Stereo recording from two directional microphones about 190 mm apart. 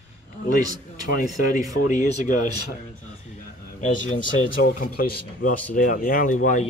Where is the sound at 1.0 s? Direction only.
45° left (ahead or behind).